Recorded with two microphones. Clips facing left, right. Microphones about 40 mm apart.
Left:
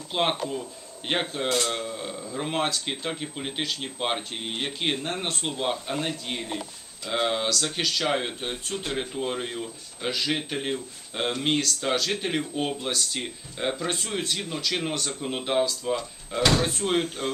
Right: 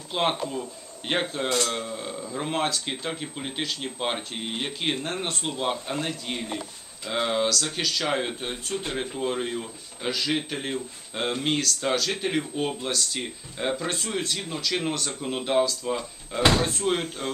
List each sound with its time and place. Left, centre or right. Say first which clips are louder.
0.1 s speech: even; centre
17.2 s a man's voice: left 2 dB; left